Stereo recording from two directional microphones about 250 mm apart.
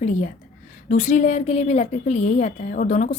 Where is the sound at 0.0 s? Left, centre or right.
Left.